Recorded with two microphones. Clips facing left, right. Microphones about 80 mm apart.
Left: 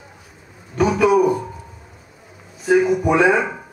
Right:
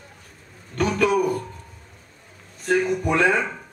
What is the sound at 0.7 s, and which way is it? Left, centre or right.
Music, centre.